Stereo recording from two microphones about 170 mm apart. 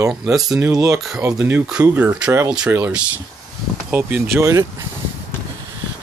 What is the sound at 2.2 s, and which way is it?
Speech, 20° right (ahead or behind).